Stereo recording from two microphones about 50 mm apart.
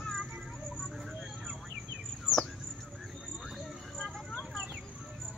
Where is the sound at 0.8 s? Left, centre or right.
Centre.